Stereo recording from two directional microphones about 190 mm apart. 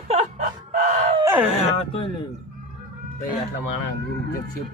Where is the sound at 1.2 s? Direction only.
5° right (ahead or behind).